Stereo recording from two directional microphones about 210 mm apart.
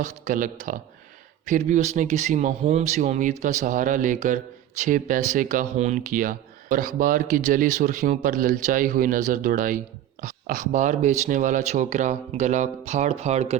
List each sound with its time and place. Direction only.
0.0 s speech: 40° right (ahead or behind)